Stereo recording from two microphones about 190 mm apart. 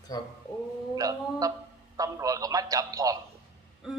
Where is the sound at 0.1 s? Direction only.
20° left (ahead or behind).